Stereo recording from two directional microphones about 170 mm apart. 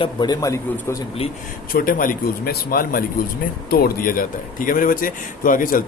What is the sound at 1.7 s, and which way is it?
Speech, 55° left (ahead or behind).